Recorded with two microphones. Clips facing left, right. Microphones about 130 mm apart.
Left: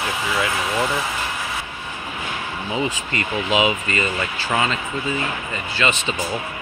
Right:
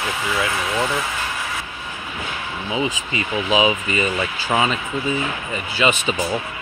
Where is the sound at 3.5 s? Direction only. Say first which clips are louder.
Right 2 dB; 20° right (ahead or behind).